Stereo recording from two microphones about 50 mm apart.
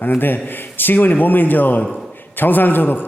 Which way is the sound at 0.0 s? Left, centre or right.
Left.